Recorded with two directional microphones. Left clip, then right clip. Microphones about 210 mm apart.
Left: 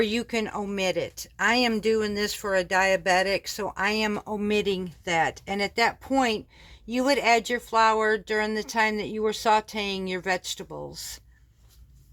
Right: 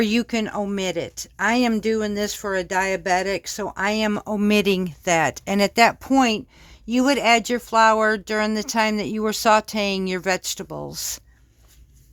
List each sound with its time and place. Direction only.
0.0 s speech: 45° right (ahead or behind)